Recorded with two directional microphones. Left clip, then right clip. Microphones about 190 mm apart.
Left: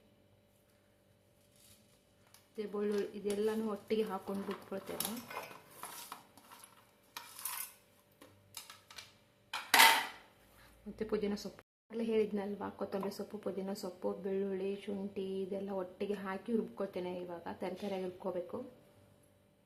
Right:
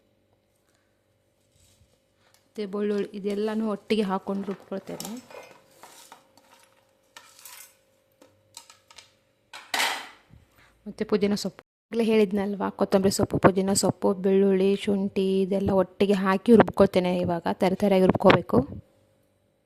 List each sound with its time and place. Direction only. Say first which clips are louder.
2.6 s speech: right 8 dB; 50° right (ahead or behind)
10.9 s a woman's voice: right 12 dB; 40° right (ahead or behind)
11.9 s speech: right 12 dB; 55° right (ahead or behind)